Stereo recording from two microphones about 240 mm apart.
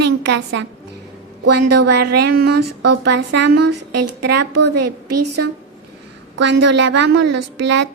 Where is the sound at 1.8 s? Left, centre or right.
Right.